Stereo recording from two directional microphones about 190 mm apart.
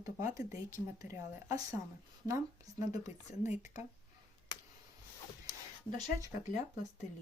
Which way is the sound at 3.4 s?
40° left (ahead or behind).